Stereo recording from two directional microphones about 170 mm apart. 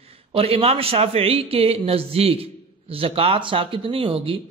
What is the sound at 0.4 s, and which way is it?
A man's voice, 35° right (ahead or behind).